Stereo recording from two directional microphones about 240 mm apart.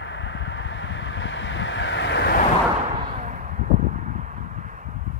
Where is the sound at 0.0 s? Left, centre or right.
Left.